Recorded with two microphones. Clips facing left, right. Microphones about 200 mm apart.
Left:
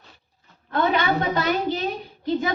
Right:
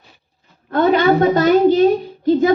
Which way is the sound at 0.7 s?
45° right (ahead or behind).